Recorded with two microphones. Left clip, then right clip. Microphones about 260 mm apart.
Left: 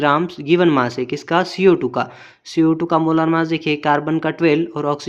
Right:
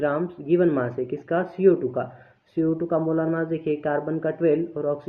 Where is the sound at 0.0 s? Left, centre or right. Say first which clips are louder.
Left 8 dB; left.